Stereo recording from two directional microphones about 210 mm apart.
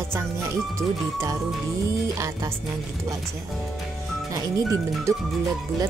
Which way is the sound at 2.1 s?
15° right (ahead or behind).